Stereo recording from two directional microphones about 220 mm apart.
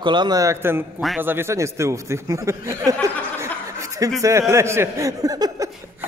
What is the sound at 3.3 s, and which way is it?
Chuckle, 15° right (ahead or behind).